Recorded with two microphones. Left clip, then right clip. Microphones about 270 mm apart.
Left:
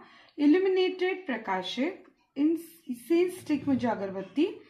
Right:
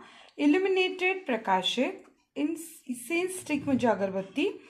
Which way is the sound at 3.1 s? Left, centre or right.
Right.